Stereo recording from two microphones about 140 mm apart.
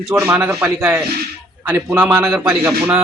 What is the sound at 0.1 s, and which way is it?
A man's voice, 15° right (ahead or behind).